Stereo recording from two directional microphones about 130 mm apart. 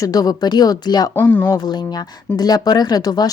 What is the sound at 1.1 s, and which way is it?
Speech, 15° left (ahead or behind).